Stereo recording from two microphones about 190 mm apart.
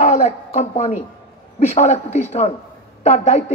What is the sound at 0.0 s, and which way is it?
A woman's voice, 35° left (ahead or behind).